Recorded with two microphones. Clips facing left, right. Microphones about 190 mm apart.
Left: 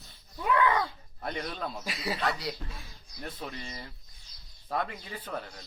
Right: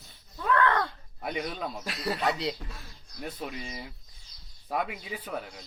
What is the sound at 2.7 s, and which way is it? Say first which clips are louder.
Speech: right 1 dB; centre (ahead or behind).